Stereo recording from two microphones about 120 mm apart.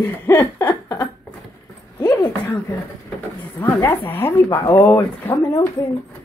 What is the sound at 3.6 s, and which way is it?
A woman's voice, 15° left (ahead or behind).